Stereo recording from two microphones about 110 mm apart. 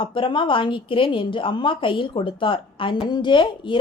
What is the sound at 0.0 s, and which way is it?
A woman's voice, 50° left (ahead or behind).